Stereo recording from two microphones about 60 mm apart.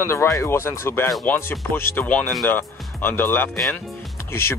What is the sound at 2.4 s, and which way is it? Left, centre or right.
Speech, left.